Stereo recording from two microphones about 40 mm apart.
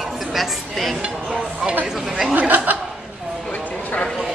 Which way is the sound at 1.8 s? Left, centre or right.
Centre.